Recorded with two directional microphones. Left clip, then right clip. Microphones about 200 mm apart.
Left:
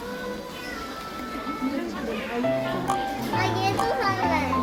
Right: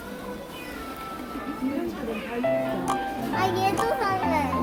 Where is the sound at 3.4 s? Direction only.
55° right (ahead or behind).